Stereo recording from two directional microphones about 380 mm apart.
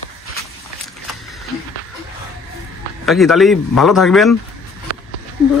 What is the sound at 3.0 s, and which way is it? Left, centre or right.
Speech, centre.